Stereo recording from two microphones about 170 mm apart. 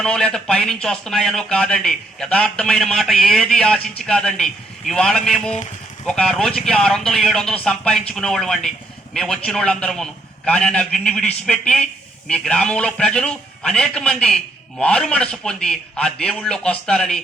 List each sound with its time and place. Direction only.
0.0 s speech: 5° left (ahead or behind)